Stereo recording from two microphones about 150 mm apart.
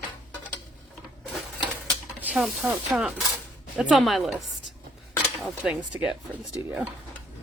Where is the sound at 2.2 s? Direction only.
10° right (ahead or behind).